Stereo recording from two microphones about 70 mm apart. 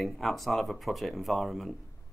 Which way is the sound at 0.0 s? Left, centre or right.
Centre.